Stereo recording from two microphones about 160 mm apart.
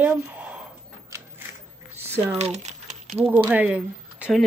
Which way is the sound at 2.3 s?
45° right (ahead or behind).